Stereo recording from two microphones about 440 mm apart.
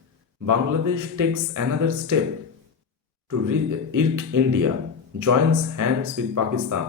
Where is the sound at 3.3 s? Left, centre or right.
Right.